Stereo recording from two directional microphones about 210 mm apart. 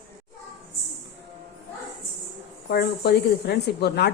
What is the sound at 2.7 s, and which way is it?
A woman's voice, 50° left (ahead or behind).